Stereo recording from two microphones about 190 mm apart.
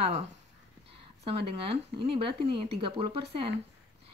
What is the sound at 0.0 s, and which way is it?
Speech, 35° right (ahead or behind).